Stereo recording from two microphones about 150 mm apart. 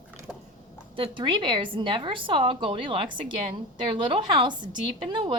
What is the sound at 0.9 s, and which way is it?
A woman's voice, 35° right (ahead or behind).